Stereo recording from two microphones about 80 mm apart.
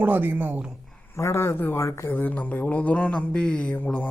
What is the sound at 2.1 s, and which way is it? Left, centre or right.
Speech, left.